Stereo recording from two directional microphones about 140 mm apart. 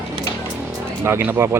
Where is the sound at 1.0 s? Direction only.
15° right (ahead or behind).